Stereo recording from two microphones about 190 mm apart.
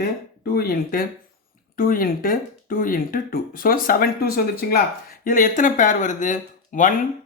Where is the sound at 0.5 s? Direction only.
50° left (ahead or behind).